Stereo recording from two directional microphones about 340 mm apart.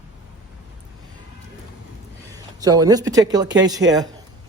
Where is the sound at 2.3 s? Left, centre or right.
Centre.